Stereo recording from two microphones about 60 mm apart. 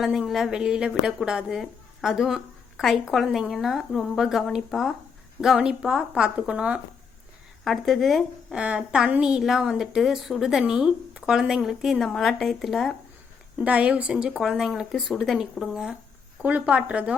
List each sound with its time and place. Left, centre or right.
0.0 s a woman's voice: centre
7.6 s a woman's voice: centre
8.5 s a woman's voice: centre
10.7 s a woman's voice: centre
13.6 s a woman's voice: right; by 14.8 s centre
14.9 s speech: centre
15.2 s a woman's voice: centre
16.4 s a woman's voice: right